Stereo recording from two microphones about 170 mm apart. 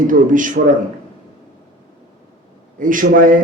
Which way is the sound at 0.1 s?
50° right (ahead or behind).